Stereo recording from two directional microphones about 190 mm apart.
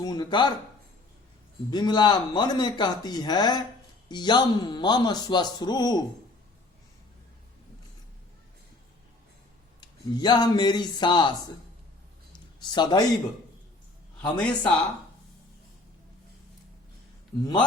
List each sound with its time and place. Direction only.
0.0 s speech: 20° left (ahead or behind)
1.7 s speech: 20° left (ahead or behind)
9.8 s speech: 25° left (ahead or behind)
12.6 s speech: 25° left (ahead or behind)
14.2 s a man's voice: 5° left (ahead or behind)